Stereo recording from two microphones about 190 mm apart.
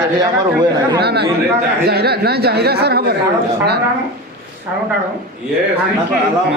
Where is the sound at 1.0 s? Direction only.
60° right (ahead or behind).